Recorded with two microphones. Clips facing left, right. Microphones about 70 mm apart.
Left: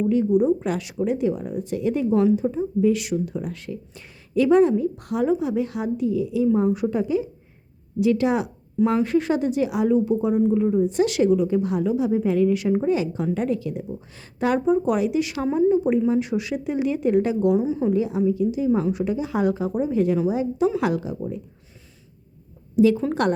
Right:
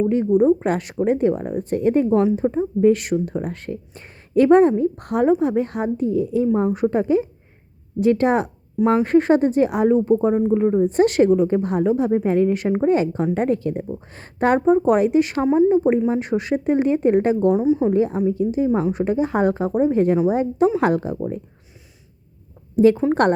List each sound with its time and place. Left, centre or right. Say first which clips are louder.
0.1 s a woman's voice: right 1 dB; right
8.8 s speech: right 3 dB; right
9.0 s a woman's voice: right 6 dB; right
17.9 s a woman's voice: right 3 dB; right
22.7 s speech: right 3 dB; right